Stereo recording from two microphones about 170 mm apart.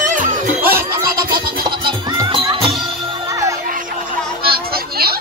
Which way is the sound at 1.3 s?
25° right (ahead or behind).